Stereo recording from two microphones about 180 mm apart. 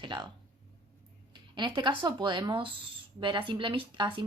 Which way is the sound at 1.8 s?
25° right (ahead or behind).